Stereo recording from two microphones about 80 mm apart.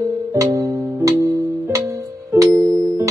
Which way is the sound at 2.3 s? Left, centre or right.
Right.